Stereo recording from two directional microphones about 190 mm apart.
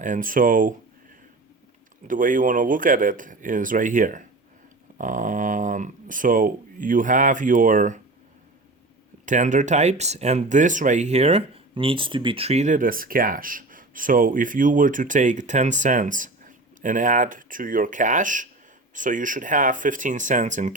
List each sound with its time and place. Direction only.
0.0 s speech: 45° right (ahead or behind)
2.0 s speech: 45° right (ahead or behind)
9.2 s speech: 40° right (ahead or behind)